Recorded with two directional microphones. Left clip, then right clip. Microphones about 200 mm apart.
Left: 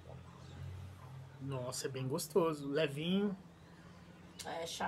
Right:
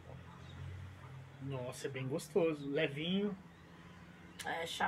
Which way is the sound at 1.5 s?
20° left (ahead or behind).